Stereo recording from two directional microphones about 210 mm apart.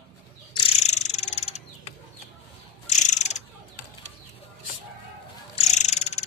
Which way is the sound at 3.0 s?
35° left (ahead or behind).